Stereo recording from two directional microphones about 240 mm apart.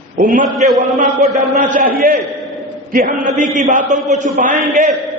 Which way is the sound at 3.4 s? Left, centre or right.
Right.